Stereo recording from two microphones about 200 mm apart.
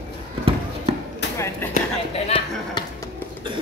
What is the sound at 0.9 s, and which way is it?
Chop, 30° right (ahead or behind).